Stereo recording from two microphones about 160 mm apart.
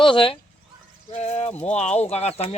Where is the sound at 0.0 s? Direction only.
35° left (ahead or behind).